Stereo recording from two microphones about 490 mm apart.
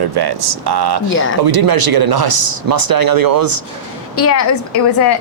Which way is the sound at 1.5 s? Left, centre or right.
Right.